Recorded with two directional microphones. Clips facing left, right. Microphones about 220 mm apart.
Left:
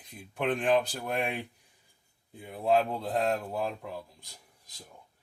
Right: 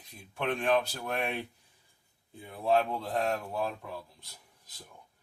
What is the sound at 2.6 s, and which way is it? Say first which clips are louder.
Speech: left 1 dB; 20° left (ahead or behind).